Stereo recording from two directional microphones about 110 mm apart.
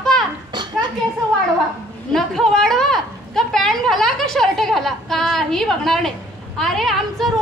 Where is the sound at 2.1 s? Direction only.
Centre (ahead or behind).